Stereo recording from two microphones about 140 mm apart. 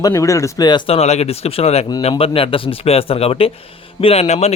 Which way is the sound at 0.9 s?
50° left (ahead or behind).